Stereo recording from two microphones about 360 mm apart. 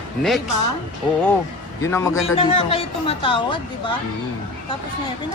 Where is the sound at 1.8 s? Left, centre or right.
Centre.